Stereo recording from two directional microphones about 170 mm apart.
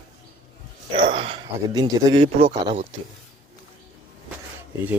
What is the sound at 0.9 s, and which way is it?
A man's voice, 35° right (ahead or behind).